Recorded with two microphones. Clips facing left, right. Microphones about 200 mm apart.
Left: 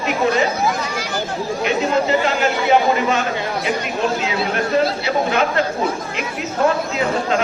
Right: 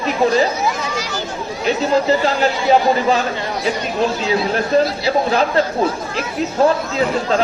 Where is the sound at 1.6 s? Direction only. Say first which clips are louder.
Right 3 dB; 35° right (ahead or behind).